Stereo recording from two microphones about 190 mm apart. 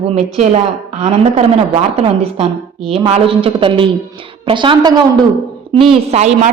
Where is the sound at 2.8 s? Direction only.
30° right (ahead or behind).